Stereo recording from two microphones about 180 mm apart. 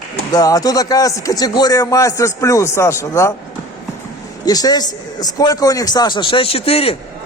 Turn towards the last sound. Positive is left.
turn(degrees=30)  # may be behind; listen again after turning